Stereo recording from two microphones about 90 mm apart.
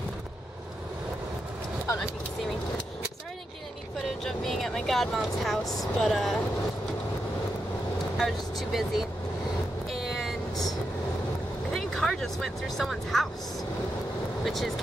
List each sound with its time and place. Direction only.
4.2 s speech: 5° left (ahead or behind)
8.2 s speech: centre (ahead or behind)
9.9 s vehicle: centre (ahead or behind)
10.5 s vehicle: 45° left (ahead or behind)
11.7 s speech: 5° left (ahead or behind)
14.4 s speech: centre (ahead or behind)